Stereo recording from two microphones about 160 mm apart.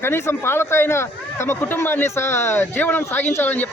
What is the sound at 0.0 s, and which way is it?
Speech, 15° left (ahead or behind).